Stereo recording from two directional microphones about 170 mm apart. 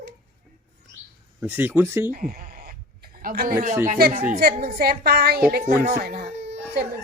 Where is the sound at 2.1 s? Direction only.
55° right (ahead or behind).